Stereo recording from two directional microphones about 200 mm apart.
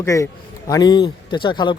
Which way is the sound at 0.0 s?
15° left (ahead or behind).